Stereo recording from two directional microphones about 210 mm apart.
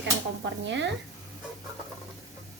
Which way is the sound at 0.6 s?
55° right (ahead or behind).